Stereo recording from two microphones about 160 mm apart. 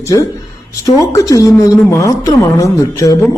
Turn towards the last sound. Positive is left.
turn(degrees=20)  # may be behind; listen again after turning